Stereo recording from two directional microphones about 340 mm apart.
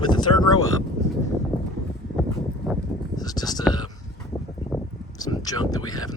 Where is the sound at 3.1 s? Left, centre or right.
Centre.